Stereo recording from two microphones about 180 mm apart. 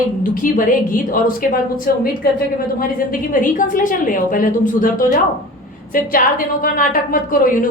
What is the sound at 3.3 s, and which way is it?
A woman's voice, 50° left (ahead or behind).